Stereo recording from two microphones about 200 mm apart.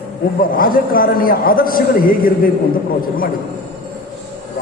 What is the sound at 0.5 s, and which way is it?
A man's voice, 45° left (ahead or behind).